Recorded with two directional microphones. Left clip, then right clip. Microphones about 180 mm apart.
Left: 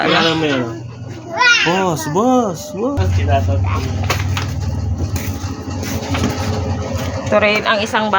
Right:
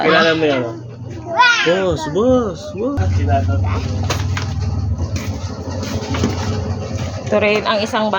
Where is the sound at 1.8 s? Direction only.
60° left (ahead or behind).